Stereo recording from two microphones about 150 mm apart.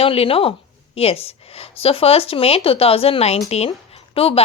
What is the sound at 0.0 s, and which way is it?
Speech, 40° left (ahead or behind).